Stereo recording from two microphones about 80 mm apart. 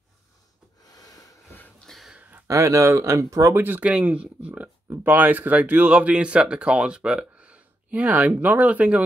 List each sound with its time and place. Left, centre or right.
1.9 s a sound: centre
2.4 s speech: right
3.5 s speech: right
3.8 s speech: centre